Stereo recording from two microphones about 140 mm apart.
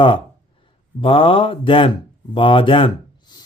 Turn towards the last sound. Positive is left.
turn(degrees=35)  # may be behind; listen again after turning